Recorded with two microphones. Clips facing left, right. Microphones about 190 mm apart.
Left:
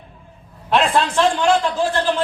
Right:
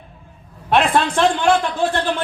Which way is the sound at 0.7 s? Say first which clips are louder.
Right 1 dB; 55° right (ahead or behind).